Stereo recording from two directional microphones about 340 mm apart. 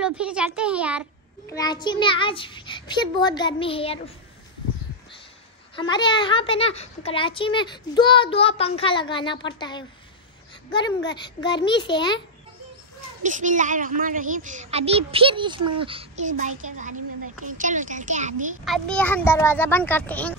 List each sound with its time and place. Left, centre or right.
0.0 s speech: centre
1.5 s a child's voice: centre
5.8 s a child's voice: centre
13.2 s a woman's voice: right
18.7 s speech: centre